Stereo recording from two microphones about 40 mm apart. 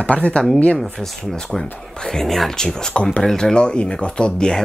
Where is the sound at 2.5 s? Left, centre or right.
Left.